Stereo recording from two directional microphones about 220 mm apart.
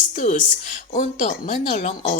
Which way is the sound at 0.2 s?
35° left (ahead or behind).